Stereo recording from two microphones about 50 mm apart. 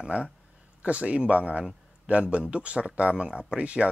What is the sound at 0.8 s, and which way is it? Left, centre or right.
Speech, right.